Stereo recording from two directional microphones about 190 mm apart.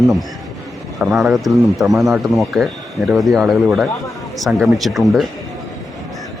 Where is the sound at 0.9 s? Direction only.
Centre (ahead or behind).